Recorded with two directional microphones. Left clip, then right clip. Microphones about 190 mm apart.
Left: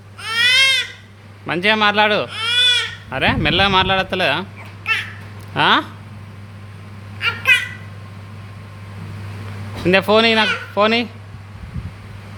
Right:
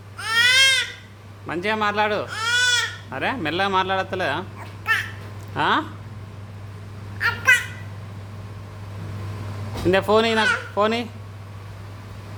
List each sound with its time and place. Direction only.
0.2 s baby cry: 30° right (ahead or behind)
1.5 s speech: 25° left (ahead or behind)
2.3 s goat: 25° right (ahead or behind)
3.1 s speech: 25° left (ahead or behind)
5.5 s speech: 20° left (ahead or behind)
7.2 s a sound: 25° right (ahead or behind)
9.9 s speech: 15° left (ahead or behind)